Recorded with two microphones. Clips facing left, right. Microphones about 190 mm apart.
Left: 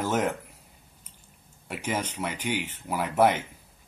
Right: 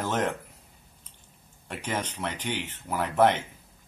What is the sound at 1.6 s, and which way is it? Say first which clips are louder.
Speech: left 1 dB; 10° left (ahead or behind).